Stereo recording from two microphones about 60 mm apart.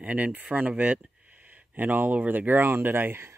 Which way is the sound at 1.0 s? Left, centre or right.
Right.